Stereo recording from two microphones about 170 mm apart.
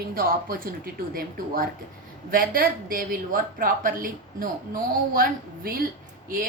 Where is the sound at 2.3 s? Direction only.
55° right (ahead or behind).